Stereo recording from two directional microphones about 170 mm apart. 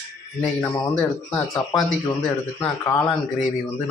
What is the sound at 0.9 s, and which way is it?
Speech, 5° left (ahead or behind).